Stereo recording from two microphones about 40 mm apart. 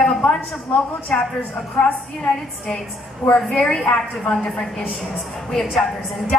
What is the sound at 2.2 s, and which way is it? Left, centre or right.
A woman's voice, centre.